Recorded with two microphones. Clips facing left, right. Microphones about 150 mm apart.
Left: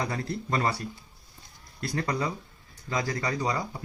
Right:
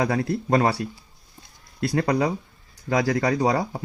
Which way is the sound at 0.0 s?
60° right (ahead or behind).